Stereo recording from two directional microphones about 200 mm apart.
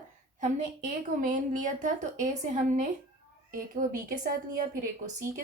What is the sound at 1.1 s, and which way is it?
A woman's voice, 40° right (ahead or behind).